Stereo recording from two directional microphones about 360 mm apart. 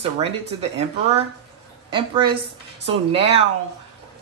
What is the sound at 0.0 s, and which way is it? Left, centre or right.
Speech, centre.